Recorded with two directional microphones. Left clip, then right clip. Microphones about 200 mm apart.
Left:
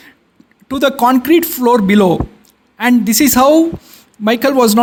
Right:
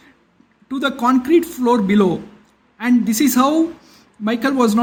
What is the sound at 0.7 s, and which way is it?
Speech, 45° left (ahead or behind).